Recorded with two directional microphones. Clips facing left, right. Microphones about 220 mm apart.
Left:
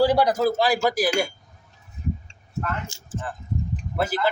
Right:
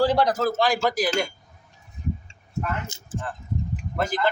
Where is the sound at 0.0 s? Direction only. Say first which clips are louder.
Left 2 dB; 10° left (ahead or behind).